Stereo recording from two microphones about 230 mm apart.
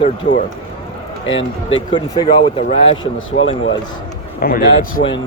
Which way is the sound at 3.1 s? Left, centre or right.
Left.